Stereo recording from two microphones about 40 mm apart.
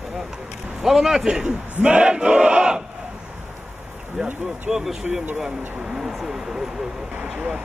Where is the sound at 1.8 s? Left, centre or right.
Right.